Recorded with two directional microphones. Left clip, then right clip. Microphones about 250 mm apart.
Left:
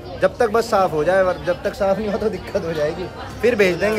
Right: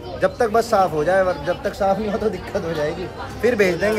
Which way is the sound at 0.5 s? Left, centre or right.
Centre.